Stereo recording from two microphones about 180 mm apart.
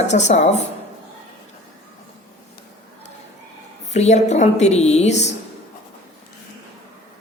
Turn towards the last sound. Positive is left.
turn(degrees=40)  # may be behind; listen again after turning